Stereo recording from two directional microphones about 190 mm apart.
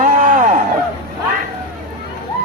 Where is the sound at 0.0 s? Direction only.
40° right (ahead or behind).